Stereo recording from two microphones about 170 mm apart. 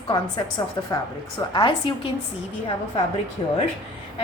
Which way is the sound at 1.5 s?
25° left (ahead or behind).